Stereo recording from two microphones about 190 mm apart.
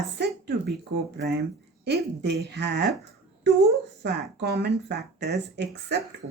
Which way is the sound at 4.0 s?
60° right (ahead or behind).